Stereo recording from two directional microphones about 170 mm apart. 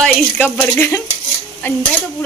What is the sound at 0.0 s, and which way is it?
Speech, 10° left (ahead or behind).